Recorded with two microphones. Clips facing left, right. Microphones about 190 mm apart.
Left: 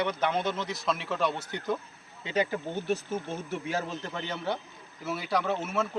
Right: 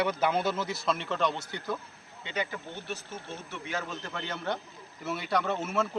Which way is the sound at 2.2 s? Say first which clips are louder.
Left 6 dB; 40° left (ahead or behind).